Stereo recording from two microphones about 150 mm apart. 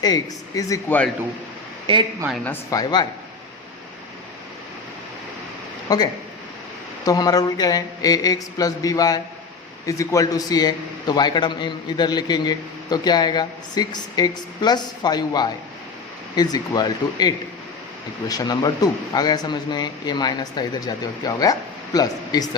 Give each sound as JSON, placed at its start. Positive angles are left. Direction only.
{"t": 0.0, "sound": "a man's voice", "side_deg": 25}
{"t": 0.9, "sound": "a man's voice", "side_deg": 10}
{"t": 1.9, "sound": "a woman's voice", "side_deg": -35}
{"t": 2.6, "sound": "a man's voice", "side_deg": 25}
{"t": 5.9, "sound": "a man's voice", "side_deg": 25}